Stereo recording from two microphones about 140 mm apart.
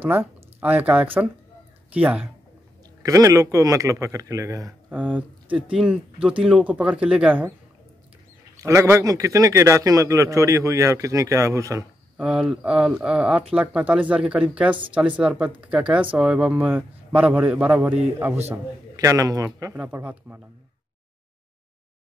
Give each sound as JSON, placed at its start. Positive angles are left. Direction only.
{"t": 0.6, "sound": "speech", "side_deg": -10}
{"t": 3.0, "sound": "a man's voice", "side_deg": -25}
{"t": 4.8, "sound": "speech", "side_deg": -10}
{"t": 8.5, "sound": "a man's voice", "side_deg": -20}
{"t": 12.2, "sound": "speech", "side_deg": -5}
{"t": 18.9, "sound": "a man's voice", "side_deg": -25}
{"t": 19.8, "sound": "speech", "side_deg": -10}